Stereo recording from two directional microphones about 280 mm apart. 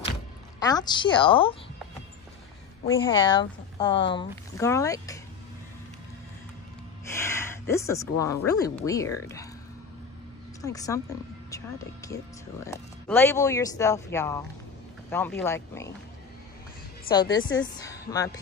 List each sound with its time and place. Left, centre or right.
0.6 s speech: centre
3.0 s speech: centre
7.2 s speech: centre
10.6 s speech: centre
17.1 s speech: centre